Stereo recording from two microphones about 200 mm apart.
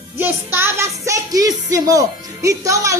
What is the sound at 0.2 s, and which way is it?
A woman's voice, 10° right (ahead or behind).